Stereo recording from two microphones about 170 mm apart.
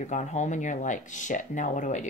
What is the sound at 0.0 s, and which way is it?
Speech, 45° left (ahead or behind).